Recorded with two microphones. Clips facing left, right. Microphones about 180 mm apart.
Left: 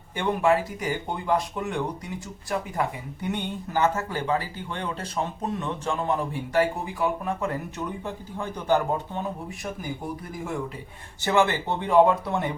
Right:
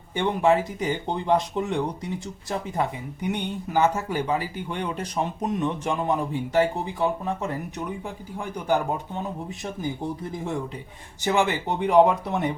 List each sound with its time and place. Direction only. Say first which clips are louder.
0.2 s speech: right 1 dB; 20° right (ahead or behind)
11.2 s speech: left 1 dB; 15° right (ahead or behind)